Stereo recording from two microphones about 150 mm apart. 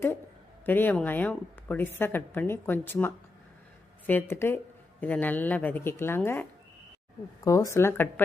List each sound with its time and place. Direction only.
0.6 s speech: 10° left (ahead or behind)